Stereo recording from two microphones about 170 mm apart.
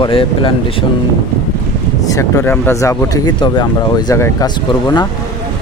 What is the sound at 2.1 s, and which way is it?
Speech, 15° left (ahead or behind).